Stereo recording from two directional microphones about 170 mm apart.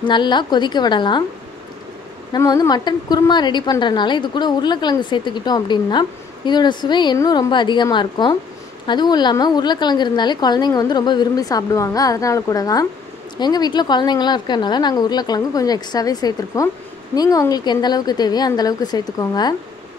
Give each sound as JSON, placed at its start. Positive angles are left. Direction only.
{"t": 0.0, "sound": "a woman's voice", "side_deg": 25}
{"t": 2.3, "sound": "a woman's voice", "side_deg": 20}